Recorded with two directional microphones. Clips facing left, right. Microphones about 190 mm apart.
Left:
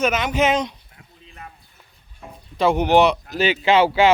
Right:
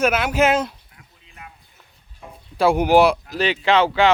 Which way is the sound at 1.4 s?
35° left (ahead or behind).